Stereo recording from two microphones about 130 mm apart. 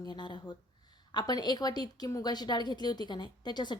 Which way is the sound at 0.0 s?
35° left (ahead or behind).